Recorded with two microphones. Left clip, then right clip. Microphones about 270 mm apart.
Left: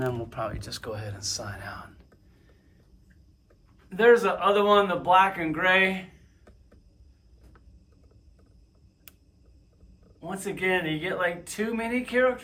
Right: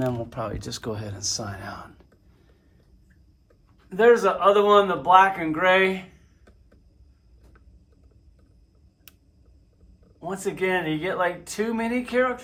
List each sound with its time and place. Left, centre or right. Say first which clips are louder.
0.1 s speech: right 2 dB; centre
3.8 s speech: right 2 dB; centre
10.2 s speech: right 4 dB; centre